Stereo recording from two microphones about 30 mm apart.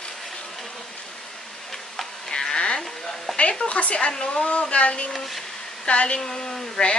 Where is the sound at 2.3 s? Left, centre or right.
Left.